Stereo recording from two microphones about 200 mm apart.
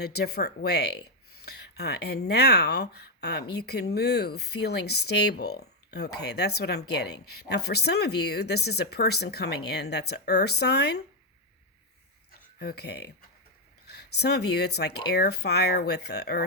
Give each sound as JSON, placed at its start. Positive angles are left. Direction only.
{"t": 0.0, "sound": "speech", "side_deg": 55}
{"t": 12.5, "sound": "speech", "side_deg": 55}